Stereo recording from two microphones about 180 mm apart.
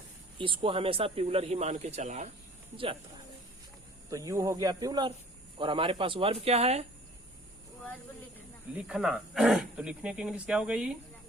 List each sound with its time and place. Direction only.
0.3 s speech: 30° right (ahead or behind)
2.7 s speech: 30° right (ahead or behind)
4.1 s speech: 20° right (ahead or behind); by 6.8 s 35° right (ahead or behind)
8.7 s speech: 5° right (ahead or behind)